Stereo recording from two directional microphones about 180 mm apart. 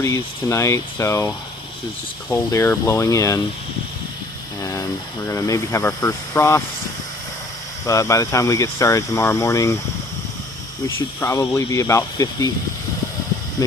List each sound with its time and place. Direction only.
0.0 s speech: 15° left (ahead or behind)
4.6 s speech: 20° left (ahead or behind)
7.9 s speech: 15° left (ahead or behind)
10.8 s speech: 15° left (ahead or behind)
13.6 s speech: 20° left (ahead or behind)